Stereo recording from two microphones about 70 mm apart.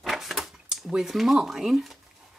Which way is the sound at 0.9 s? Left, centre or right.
Centre.